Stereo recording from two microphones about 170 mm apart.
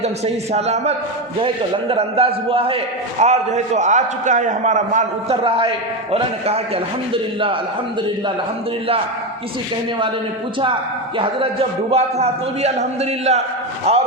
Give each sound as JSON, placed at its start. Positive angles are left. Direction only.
{"t": 0.0, "sound": "a man's voice", "side_deg": -40}
{"t": 5.4, "sound": "a man's voice", "side_deg": -35}
{"t": 11.9, "sound": "a man's voice", "side_deg": -40}